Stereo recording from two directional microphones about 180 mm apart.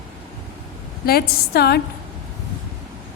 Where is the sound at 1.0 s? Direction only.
60° left (ahead or behind).